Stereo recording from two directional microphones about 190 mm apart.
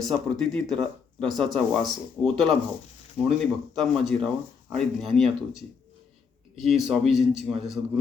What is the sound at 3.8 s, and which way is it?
Speech, centre (ahead or behind).